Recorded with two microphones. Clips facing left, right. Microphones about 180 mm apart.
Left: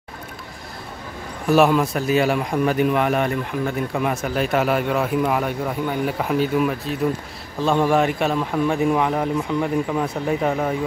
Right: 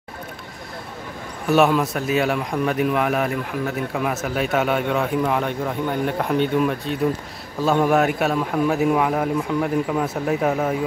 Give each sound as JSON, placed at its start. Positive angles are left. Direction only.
{"t": 1.5, "sound": "a man's voice", "side_deg": 0}